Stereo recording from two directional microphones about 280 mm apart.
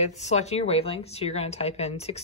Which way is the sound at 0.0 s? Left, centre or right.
Left.